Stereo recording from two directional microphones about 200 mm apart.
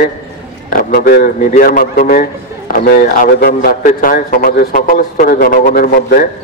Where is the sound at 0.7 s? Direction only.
45° left (ahead or behind).